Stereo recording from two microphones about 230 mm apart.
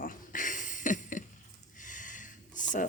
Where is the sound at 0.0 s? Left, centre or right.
Left.